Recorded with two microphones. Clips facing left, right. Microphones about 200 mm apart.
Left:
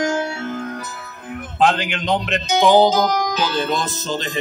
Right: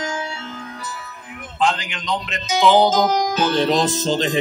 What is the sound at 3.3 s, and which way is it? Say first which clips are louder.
Speech: right 4 dB; 60° right (ahead or behind).